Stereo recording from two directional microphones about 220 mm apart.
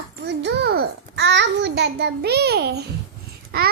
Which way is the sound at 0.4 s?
50° right (ahead or behind).